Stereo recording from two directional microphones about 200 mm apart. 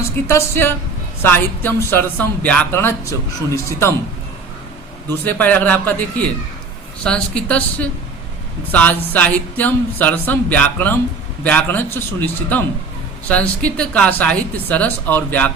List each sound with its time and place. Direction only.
0.3 s speech: 10° left (ahead or behind)
5.2 s speech: 10° left (ahead or behind)
7.0 s a woman's voice: 5° left (ahead or behind)